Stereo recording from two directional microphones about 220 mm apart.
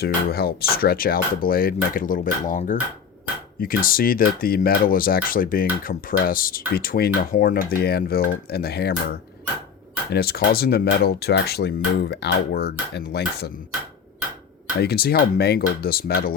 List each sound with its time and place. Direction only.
0.0 s speech: 45° left (ahead or behind)
10.1 s speech: 45° left (ahead or behind)
14.8 s speech: 45° left (ahead or behind)